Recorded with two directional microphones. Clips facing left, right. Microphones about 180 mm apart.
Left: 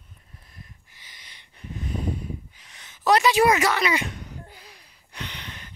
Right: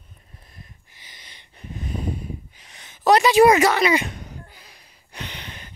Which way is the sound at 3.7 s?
20° right (ahead or behind).